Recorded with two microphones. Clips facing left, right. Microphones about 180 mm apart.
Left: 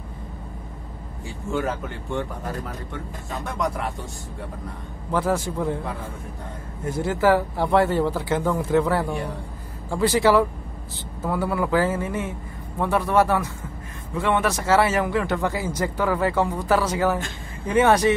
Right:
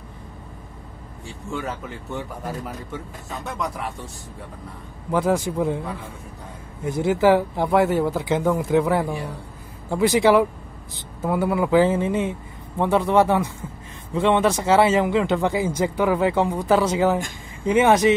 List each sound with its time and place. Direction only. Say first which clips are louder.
1.5 s speech: left 4 dB; centre (ahead or behind)
5.1 s speech: right 2 dB; 15° right (ahead or behind)
6.8 s speech: right 3 dB; 15° right (ahead or behind)
9.0 s speech: even; centre (ahead or behind)
9.8 s speech: right 2 dB; 15° right (ahead or behind)